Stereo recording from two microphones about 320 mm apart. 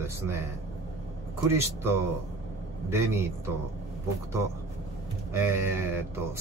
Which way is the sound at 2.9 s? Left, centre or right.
Centre.